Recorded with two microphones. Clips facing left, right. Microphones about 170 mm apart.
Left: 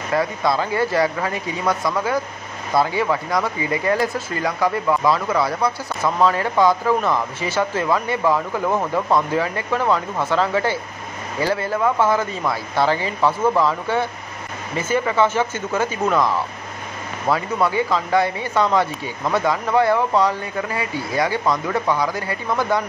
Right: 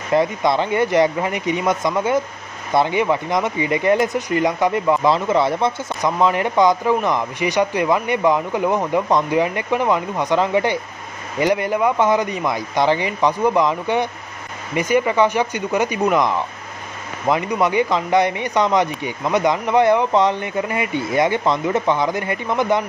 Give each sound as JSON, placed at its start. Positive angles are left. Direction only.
{"t": 0.1, "sound": "speech", "side_deg": -20}